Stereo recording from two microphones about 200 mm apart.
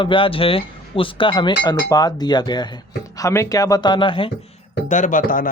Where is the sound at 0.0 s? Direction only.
25° left (ahead or behind).